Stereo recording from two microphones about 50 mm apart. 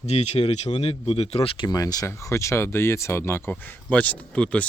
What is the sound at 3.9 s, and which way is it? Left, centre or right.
Speech, left.